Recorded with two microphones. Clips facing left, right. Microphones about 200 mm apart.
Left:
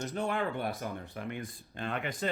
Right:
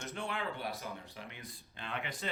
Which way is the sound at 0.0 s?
40° left (ahead or behind).